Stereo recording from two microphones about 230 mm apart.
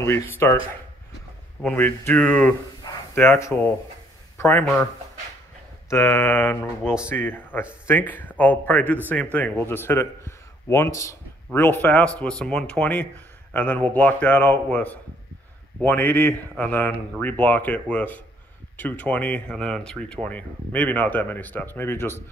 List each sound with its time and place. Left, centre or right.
0.0 s speech: centre
1.6 s speech: centre
5.9 s speech: centre
6.8 s speech: centre
7.1 s speech: centre